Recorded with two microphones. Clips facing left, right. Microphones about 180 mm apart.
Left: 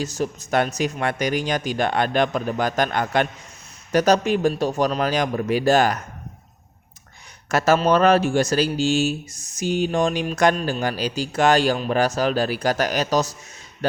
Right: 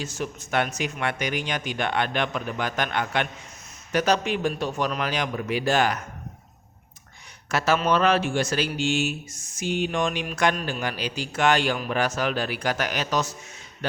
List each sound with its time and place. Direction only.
0.0 s speech: 40° left (ahead or behind)
7.4 s speech: 45° left (ahead or behind)